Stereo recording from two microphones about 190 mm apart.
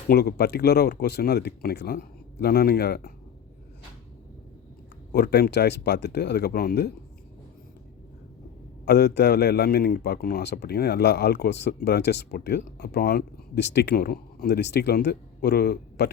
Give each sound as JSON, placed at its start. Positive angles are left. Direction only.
{"t": 0.1, "sound": "a man's voice", "side_deg": 55}
{"t": 5.1, "sound": "a man's voice", "side_deg": 55}
{"t": 8.8, "sound": "a man's voice", "side_deg": 60}